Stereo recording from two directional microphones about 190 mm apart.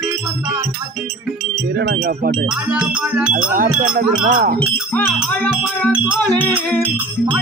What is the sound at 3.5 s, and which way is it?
Music, 45° right (ahead or behind).